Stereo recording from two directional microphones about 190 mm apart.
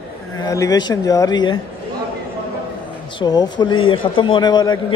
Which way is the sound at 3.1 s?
20° left (ahead or behind).